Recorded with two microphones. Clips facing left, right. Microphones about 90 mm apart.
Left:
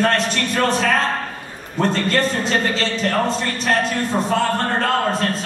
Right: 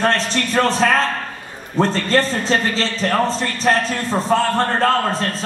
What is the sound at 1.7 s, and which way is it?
A man's voice, 30° right (ahead or behind).